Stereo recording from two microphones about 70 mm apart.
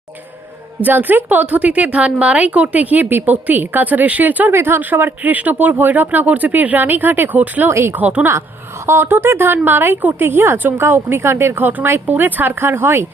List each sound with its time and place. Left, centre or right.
0.9 s a woman's voice: right
7.7 s a woman's voice: right
7.9 s a woman's voice: right